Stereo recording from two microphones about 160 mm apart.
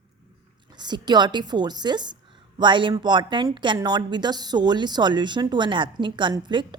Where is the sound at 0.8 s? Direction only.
25° right (ahead or behind).